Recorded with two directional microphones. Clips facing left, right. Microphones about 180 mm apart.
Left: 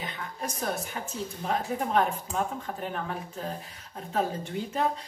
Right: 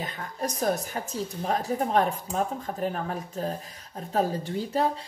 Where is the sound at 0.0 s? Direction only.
40° right (ahead or behind).